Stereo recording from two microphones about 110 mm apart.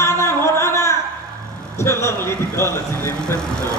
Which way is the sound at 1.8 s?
25° left (ahead or behind).